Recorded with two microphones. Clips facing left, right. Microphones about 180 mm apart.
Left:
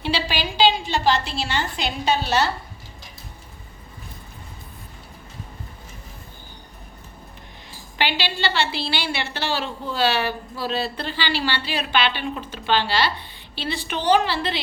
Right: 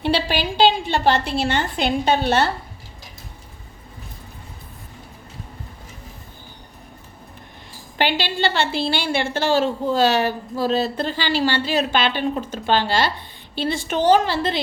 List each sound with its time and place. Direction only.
0.0 s a woman's voice: 55° right (ahead or behind)
7.9 s a woman's voice: 50° right (ahead or behind)